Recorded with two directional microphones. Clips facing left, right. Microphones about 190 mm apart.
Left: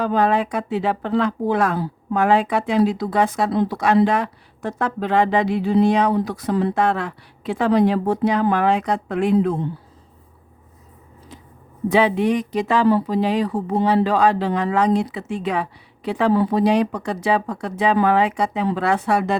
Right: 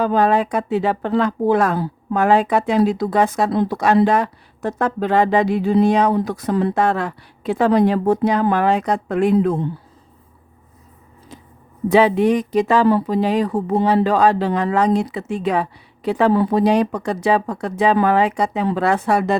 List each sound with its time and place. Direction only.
0.0 s speech: 40° right (ahead or behind)
11.9 s speech: 40° right (ahead or behind)